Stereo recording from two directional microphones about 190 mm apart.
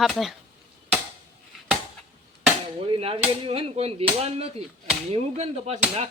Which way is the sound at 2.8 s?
30° right (ahead or behind).